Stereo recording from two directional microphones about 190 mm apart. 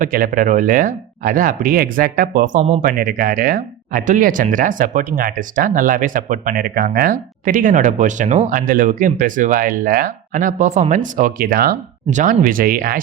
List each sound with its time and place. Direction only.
0.0 s speech: 45° right (ahead or behind)